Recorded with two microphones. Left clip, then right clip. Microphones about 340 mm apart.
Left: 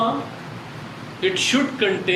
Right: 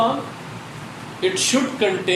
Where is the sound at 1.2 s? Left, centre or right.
Centre.